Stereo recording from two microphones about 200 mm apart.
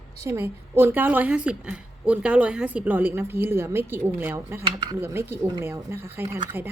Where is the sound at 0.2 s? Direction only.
15° right (ahead or behind).